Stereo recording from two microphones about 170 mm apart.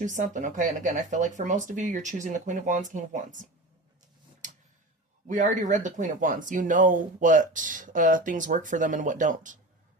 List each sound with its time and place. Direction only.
0.0 s speech: 45° right (ahead or behind)
4.4 s a sound: 45° right (ahead or behind)
5.3 s speech: 50° right (ahead or behind)